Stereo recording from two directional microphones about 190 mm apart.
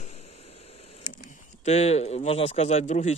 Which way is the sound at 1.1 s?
50° left (ahead or behind).